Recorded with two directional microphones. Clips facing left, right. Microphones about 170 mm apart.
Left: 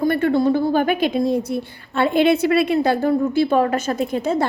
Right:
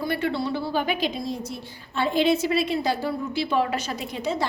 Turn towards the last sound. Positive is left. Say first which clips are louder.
# left 8 dB
turn(degrees=50)  # may be behind; listen again after turning